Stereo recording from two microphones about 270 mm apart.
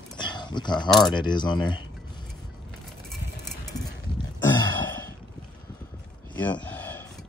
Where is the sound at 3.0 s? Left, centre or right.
Centre.